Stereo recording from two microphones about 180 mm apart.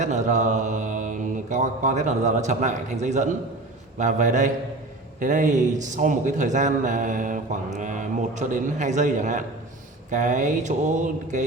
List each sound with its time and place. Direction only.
0.0 s a man's voice: 40° right (ahead or behind)